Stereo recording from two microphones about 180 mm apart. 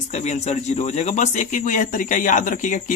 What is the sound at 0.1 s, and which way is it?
A man's voice, 40° left (ahead or behind).